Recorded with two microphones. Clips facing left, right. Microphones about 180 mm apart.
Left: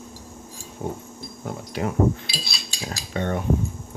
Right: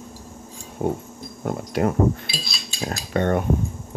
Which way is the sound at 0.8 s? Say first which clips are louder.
Right 6 dB; 55° right (ahead or behind).